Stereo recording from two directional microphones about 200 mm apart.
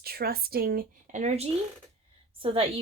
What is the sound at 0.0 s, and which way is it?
A woman's voice, 50° right (ahead or behind).